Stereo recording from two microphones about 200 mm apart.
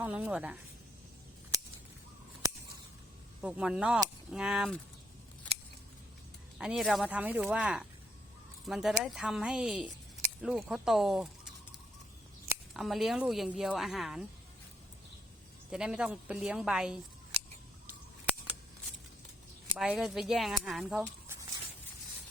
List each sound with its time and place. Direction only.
0.0 s speech: 5° right (ahead or behind)
3.4 s speech: 5° right (ahead or behind)
6.6 s speech: centre (ahead or behind)
12.7 s speech: centre (ahead or behind)
15.7 s speech: 5° right (ahead or behind)
17.8 s a sound: 5° right (ahead or behind)
19.7 s speech: 5° right (ahead or behind)